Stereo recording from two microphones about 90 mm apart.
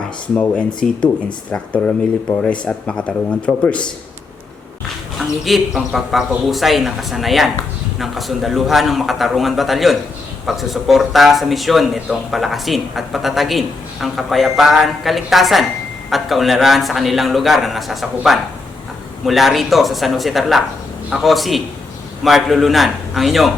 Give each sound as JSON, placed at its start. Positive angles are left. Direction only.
{"t": 0.3, "sound": "speech", "side_deg": 20}
{"t": 5.5, "sound": "speech", "side_deg": -5}